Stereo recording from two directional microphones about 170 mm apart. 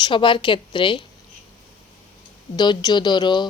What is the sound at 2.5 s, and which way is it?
Speech, 25° left (ahead or behind).